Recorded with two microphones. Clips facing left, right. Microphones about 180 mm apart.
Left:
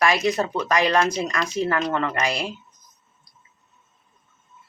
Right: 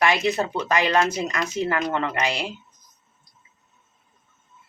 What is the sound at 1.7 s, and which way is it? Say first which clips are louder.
Speech: left 1 dB; 20° right (ahead or behind).